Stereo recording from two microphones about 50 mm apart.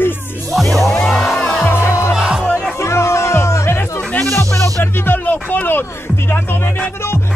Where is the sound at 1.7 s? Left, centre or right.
Left.